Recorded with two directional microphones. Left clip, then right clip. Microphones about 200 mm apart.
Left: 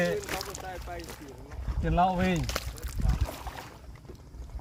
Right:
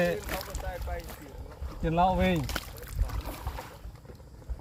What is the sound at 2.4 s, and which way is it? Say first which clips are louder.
Speech: left 1 dB; 15° left (ahead or behind).